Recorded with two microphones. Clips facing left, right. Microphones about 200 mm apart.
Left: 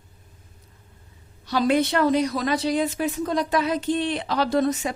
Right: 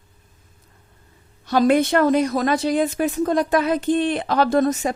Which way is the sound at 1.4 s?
50° right (ahead or behind).